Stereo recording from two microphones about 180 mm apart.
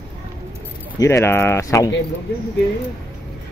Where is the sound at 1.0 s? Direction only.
15° left (ahead or behind).